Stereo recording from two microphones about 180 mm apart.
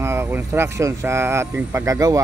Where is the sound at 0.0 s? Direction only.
15° right (ahead or behind).